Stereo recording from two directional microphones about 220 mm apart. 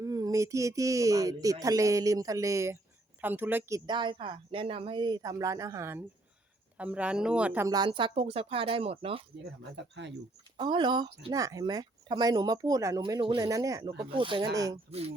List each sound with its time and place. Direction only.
0.0 s speech: 15° right (ahead or behind)
3.8 s speech: 20° right (ahead or behind)
9.9 s speech: 55° right (ahead or behind)
10.6 s speech: 20° right (ahead or behind)
14.8 s speech: 30° right (ahead or behind)